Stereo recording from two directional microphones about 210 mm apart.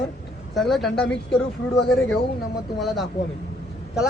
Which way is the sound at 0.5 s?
Centre (ahead or behind).